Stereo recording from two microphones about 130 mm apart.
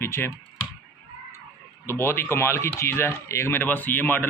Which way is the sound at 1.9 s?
20° left (ahead or behind).